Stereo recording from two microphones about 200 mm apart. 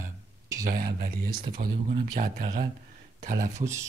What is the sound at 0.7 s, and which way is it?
Speech, 45° right (ahead or behind).